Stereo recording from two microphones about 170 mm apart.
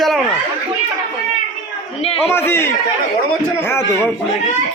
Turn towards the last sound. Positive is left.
turn(degrees=15)  # may be behind; listen again after turning